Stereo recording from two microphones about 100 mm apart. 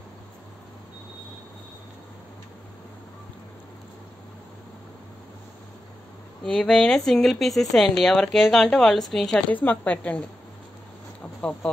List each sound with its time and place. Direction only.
6.4 s a woman's voice: 10° left (ahead or behind)
9.5 s speech: 15° left (ahead or behind)